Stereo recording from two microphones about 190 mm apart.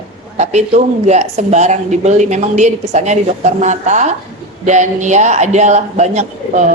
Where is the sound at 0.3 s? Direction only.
35° right (ahead or behind).